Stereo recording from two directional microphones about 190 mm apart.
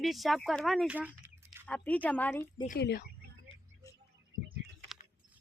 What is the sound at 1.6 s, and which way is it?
Speech, 5° left (ahead or behind).